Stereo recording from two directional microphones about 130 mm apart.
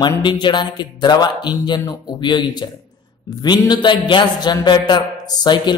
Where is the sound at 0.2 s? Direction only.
35° left (ahead or behind).